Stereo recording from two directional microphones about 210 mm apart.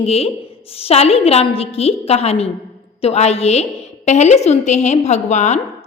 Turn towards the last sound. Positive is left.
turn(degrees=35)  # may be behind; listen again after turning